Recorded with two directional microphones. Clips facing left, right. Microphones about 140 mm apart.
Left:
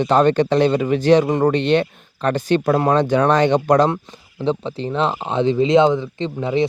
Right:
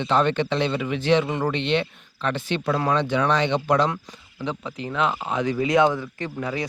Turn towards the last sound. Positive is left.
turn(degrees=25)  # may be behind; listen again after turning